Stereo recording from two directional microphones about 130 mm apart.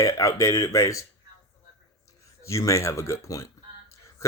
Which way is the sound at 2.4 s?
25° left (ahead or behind).